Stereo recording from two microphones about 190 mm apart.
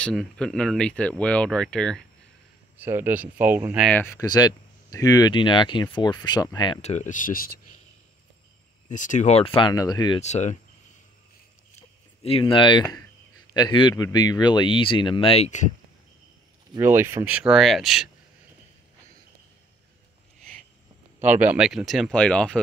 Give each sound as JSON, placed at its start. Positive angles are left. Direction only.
{"t": 0.0, "sound": "speech", "side_deg": 5}
{"t": 2.8, "sound": "speech", "side_deg": -10}
{"t": 3.9, "sound": "speech", "side_deg": 10}
{"t": 6.8, "sound": "speech", "side_deg": 35}
{"t": 8.8, "sound": "speech", "side_deg": 40}
{"t": 9.6, "sound": "speech", "side_deg": 20}
{"t": 10.2, "sound": "speech", "side_deg": 40}
{"t": 12.2, "sound": "speech", "side_deg": 30}
{"t": 16.7, "sound": "speech", "side_deg": -15}
{"t": 21.4, "sound": "speech", "side_deg": -5}